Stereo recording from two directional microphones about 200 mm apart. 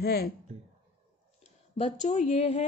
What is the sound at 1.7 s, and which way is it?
Speech, 35° left (ahead or behind).